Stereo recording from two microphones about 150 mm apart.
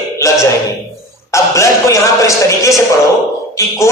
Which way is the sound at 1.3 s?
20° left (ahead or behind).